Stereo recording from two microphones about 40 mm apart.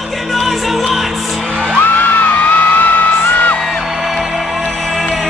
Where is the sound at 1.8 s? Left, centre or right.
Left.